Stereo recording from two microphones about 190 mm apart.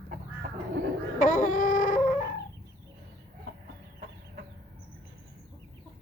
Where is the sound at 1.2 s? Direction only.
45° left (ahead or behind).